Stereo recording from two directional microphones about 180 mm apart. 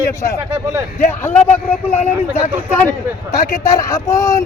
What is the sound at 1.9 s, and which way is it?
Speech, 35° left (ahead or behind).